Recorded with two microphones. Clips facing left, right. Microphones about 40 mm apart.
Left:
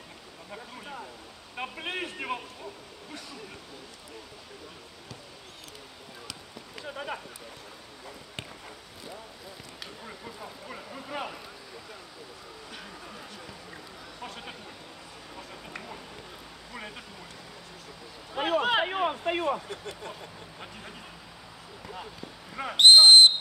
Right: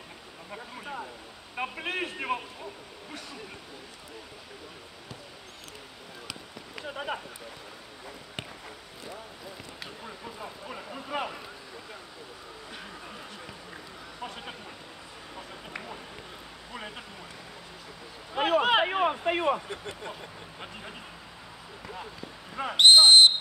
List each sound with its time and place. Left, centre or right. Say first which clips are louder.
0.5 s a man's voice: right 2 dB; centre
6.9 s a man's voice: right 2 dB; centre
10.4 s a man's voice: right 2 dB; centre
14.2 s a man's voice: right 2 dB; centre
15.3 s a sound: right 1 dB; centre
16.7 s a man's voice: right 1 dB; centre
18.3 s a man's voice: right 2 dB; centre
21.8 s speech: even; centre